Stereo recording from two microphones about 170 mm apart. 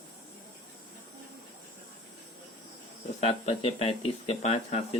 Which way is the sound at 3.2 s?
35° left (ahead or behind).